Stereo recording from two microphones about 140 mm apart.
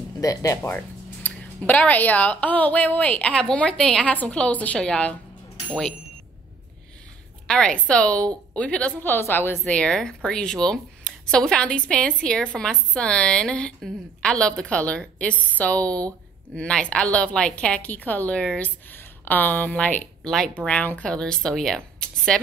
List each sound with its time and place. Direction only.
0.2 s speech: 25° left (ahead or behind)
0.7 s a woman's voice: 10° left (ahead or behind)
7.4 s a woman's voice: 5° left (ahead or behind)